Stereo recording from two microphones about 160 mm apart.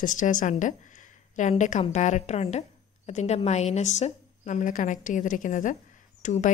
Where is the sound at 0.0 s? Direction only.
55° left (ahead or behind).